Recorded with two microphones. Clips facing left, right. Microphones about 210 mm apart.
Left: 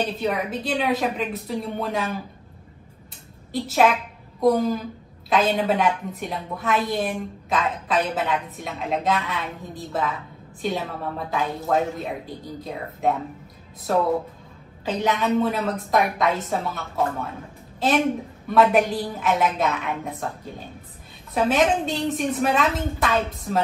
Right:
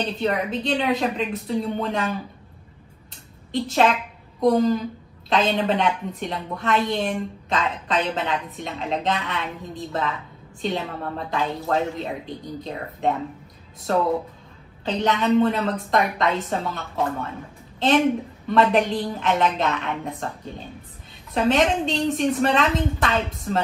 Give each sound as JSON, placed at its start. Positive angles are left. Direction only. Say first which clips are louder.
{"t": 0.0, "sound": "a woman's voice", "louder": "right 1 dB", "side_deg": 0}
{"t": 3.5, "sound": "a woman's voice", "louder": "even", "side_deg": 5}
{"t": 10.6, "sound": "a woman's voice", "louder": "even", "side_deg": 5}
{"t": 14.9, "sound": "a woman's voice", "louder": "right 2 dB", "side_deg": 5}
{"t": 18.5, "sound": "a woman's voice", "louder": "left 1 dB", "side_deg": 5}